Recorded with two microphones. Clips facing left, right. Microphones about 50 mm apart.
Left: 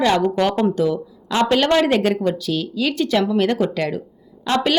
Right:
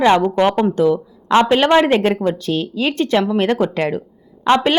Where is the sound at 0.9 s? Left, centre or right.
Right.